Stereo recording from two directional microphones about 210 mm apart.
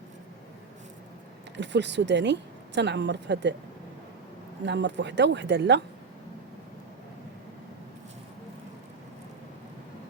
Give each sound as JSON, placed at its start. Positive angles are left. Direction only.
{"t": 1.5, "sound": "a woman's voice", "side_deg": -55}
{"t": 4.6, "sound": "a woman's voice", "side_deg": -55}